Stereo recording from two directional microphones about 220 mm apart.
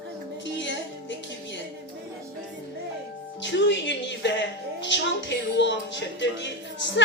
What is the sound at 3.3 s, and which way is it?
Music, 55° left (ahead or behind).